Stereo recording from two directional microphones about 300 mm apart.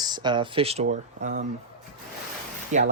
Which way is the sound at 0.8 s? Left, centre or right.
Right.